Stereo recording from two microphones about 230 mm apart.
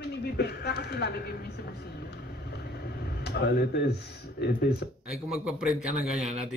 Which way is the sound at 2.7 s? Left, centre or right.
Left.